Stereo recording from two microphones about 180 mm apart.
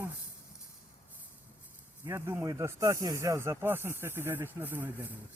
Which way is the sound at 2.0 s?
15° right (ahead or behind).